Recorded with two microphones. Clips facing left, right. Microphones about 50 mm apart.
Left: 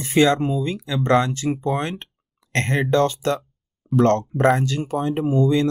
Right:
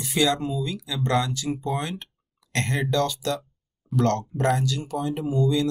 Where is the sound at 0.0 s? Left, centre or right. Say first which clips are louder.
Left 6 dB; left.